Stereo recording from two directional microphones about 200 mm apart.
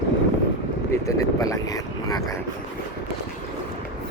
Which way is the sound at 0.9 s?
15° left (ahead or behind).